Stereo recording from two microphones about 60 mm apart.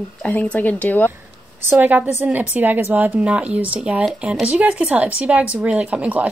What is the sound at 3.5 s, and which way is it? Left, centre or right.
Speech, right.